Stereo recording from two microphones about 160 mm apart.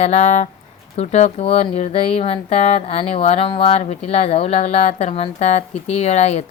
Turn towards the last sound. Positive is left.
turn(degrees=40)  # may be behind; listen again after turning